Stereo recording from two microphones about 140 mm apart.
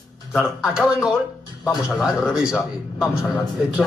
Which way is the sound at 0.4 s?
5° right (ahead or behind).